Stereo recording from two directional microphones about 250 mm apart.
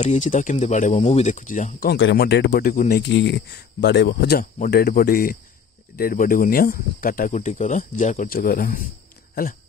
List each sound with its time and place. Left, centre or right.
0.0 s speech: left
3.0 s speech: left